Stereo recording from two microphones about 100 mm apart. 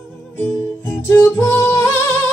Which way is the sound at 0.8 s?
25° left (ahead or behind).